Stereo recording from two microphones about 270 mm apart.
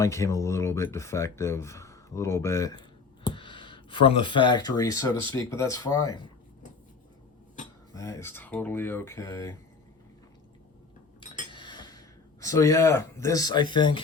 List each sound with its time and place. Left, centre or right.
0.0 s speech: centre
7.9 s speech: centre
11.3 s a sound: centre
13.7 s speech: centre